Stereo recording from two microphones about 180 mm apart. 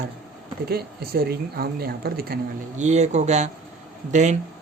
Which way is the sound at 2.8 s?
40° right (ahead or behind).